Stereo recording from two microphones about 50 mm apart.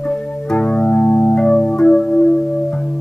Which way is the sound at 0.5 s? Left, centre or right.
Left.